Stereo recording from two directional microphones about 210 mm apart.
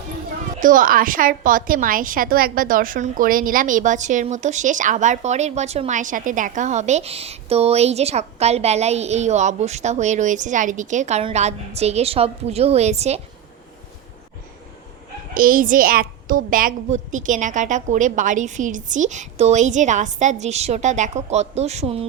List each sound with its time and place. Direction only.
0.6 s a woman's voice: 40° right (ahead or behind)
15.4 s a woman's voice: 40° right (ahead or behind)